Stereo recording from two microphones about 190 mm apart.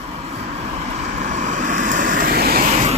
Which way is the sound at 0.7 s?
35° right (ahead or behind).